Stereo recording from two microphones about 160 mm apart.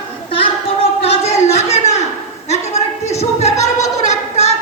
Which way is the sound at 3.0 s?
40° left (ahead or behind).